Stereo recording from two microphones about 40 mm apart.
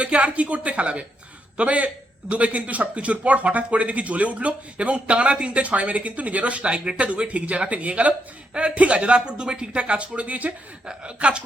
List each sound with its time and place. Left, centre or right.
0.0 s speech: right
10.8 s speech: right